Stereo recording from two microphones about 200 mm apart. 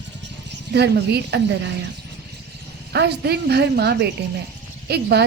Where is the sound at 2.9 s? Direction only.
55° right (ahead or behind).